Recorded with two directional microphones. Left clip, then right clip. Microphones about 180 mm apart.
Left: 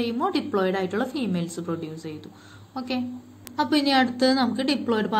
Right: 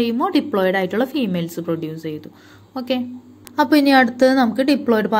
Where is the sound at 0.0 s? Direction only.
35° right (ahead or behind).